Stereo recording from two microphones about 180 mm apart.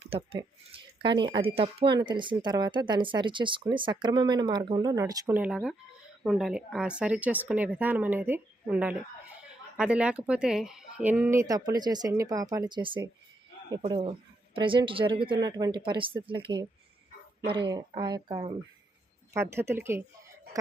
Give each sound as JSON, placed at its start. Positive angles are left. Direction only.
{"t": 0.0, "sound": "speech", "side_deg": -30}
{"t": 17.7, "sound": "speech", "side_deg": -25}
{"t": 19.3, "sound": "speech", "side_deg": -15}